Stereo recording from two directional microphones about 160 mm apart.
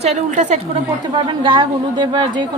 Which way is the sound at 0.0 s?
45° right (ahead or behind).